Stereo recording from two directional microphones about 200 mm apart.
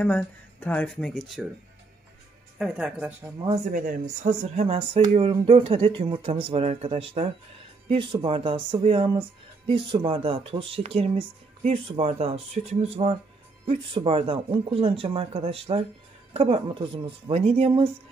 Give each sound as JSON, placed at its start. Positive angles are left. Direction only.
{"t": 0.0, "sound": "speech", "side_deg": 5}
{"t": 2.6, "sound": "speech", "side_deg": -5}
{"t": 3.7, "sound": "speech", "side_deg": -45}
{"t": 4.2, "sound": "speech", "side_deg": -35}